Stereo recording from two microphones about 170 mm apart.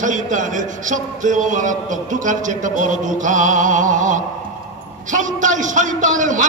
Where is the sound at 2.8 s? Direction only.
50° right (ahead or behind).